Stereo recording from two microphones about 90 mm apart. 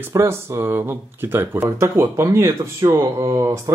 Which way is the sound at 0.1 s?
30° right (ahead or behind).